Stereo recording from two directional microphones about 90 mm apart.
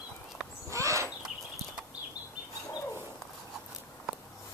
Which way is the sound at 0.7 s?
35° right (ahead or behind).